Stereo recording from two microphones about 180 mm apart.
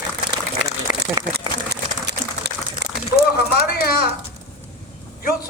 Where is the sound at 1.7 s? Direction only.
65° right (ahead or behind).